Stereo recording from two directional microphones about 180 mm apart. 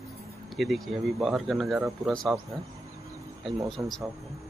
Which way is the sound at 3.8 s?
15° right (ahead or behind).